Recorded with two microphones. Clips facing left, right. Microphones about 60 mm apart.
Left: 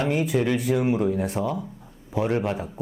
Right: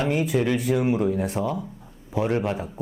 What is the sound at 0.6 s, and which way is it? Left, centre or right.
Speech, centre.